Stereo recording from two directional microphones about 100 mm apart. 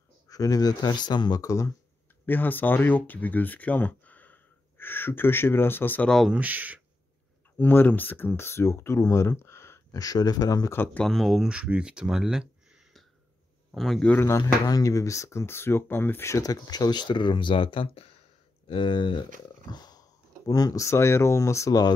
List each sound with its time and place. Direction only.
0.3 s speech: 35° left (ahead or behind)
2.2 s speech: 20° left (ahead or behind)
6.2 s speech: 15° right (ahead or behind)
7.5 s speech: 20° left (ahead or behind); by 10.7 s 35° left (ahead or behind)
10.7 s speech: 20° left (ahead or behind)
11.1 s a man's voice: centre (ahead or behind)
14.0 s speech: 20° left (ahead or behind); by 19.2 s 50° left (ahead or behind)
19.7 s a sound: 40° left (ahead or behind)
20.4 s speech: 35° left (ahead or behind)